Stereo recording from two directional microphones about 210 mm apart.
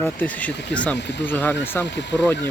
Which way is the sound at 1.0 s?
55° left (ahead or behind).